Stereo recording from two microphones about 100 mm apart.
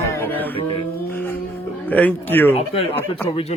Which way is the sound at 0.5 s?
65° left (ahead or behind).